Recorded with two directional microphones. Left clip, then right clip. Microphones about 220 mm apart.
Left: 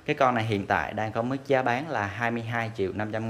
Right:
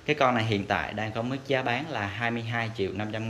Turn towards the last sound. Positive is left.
turn(degrees=20)  # may be behind; listen again after turning